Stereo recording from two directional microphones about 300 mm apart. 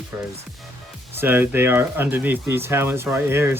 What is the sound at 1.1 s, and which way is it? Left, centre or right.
Speech, centre.